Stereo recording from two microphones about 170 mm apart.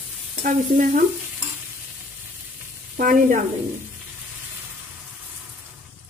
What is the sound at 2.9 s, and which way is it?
Stir, 55° right (ahead or behind).